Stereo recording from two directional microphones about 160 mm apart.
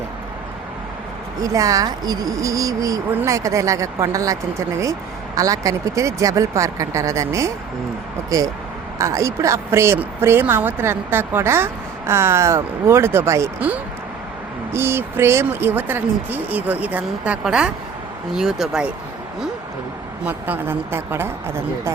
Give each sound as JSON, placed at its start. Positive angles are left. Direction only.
{"t": 1.4, "sound": "a woman's voice", "side_deg": -20}
{"t": 20.2, "sound": "a woman's voice", "side_deg": -10}